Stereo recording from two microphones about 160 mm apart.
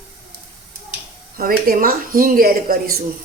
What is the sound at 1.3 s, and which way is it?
Speech, 65° right (ahead or behind).